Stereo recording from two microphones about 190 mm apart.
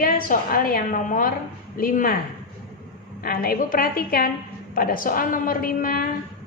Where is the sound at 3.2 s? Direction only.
50° left (ahead or behind).